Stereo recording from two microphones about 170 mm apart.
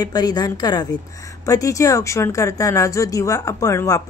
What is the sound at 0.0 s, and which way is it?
A woman's voice, 25° left (ahead or behind).